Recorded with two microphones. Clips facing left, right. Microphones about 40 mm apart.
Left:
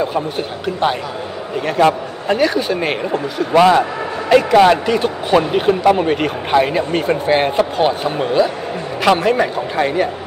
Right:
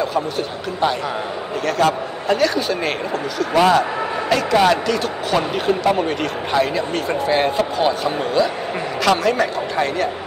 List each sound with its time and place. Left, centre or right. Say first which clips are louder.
0.0 s a man's voice: left 2 dB; left